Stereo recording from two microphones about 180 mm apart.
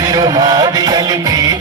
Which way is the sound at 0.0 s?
20° right (ahead or behind).